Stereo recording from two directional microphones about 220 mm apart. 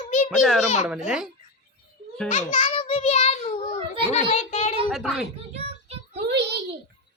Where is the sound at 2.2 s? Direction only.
30° left (ahead or behind).